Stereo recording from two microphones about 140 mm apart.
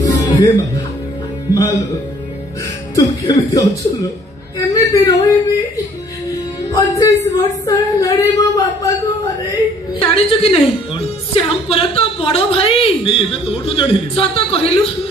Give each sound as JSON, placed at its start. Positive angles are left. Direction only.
{"t": 0.0, "sound": "music", "side_deg": 25}
{"t": 1.5, "sound": "speech", "side_deg": 25}
{"t": 3.0, "sound": "speech", "side_deg": 25}
{"t": 6.7, "sound": "speech", "side_deg": 25}
{"t": 9.9, "sound": "a woman's voice", "side_deg": 40}